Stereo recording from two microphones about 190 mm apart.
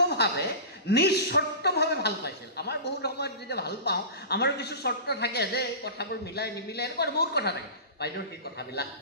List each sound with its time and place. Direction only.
0.1 s a woman's voice: 60° left (ahead or behind)